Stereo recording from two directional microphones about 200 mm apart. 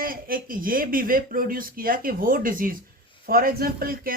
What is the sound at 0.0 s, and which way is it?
Speech, 45° right (ahead or behind).